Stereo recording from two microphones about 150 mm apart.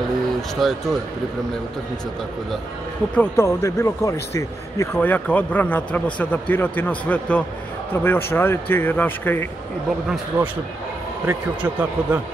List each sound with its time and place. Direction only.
0.6 s speech: centre (ahead or behind)
3.2 s speech: 20° left (ahead or behind)
10.3 s speech: 15° right (ahead or behind)